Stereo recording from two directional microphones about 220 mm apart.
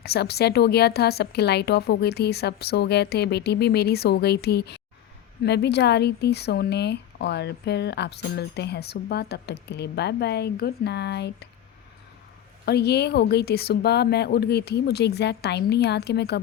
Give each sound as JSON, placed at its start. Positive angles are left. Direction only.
{"t": 0.0, "sound": "speech", "side_deg": 45}
{"t": 12.6, "sound": "speech", "side_deg": 50}